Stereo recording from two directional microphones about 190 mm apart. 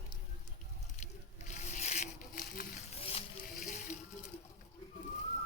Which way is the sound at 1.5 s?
40° left (ahead or behind).